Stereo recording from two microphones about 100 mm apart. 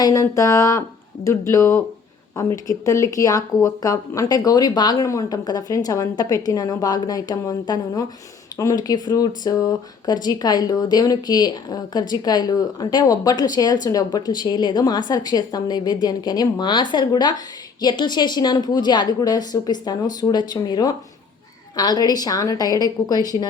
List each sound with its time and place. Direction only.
0.0 s speech: 35° left (ahead or behind)